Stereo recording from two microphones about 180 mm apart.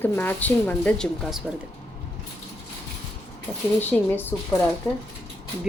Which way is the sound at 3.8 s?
10° left (ahead or behind).